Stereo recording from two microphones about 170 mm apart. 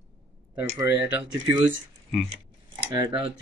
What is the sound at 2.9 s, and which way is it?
Speech, 25° right (ahead or behind).